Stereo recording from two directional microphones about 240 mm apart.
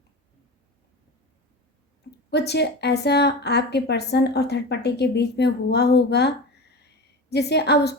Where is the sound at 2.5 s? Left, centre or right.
Left.